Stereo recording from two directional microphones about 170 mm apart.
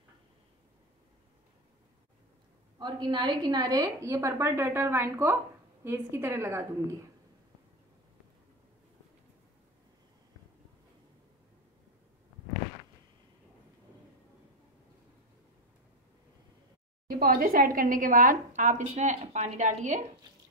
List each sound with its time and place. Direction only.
2.8 s a woman's voice: 25° right (ahead or behind)
17.2 s a woman's voice: 60° right (ahead or behind)